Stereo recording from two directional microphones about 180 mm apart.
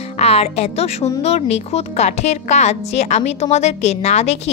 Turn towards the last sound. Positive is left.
turn(degrees=35)  # may be behind; listen again after turning